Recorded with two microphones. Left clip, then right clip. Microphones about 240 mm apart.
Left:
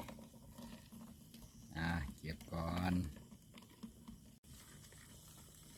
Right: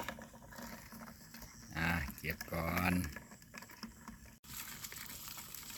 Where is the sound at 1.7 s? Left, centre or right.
Centre.